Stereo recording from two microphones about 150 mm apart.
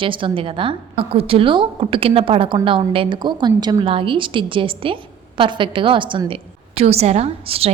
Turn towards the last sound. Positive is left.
turn(degrees=-40)  # may be behind; listen again after turning